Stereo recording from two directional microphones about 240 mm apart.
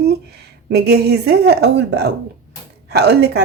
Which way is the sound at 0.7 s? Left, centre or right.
Right.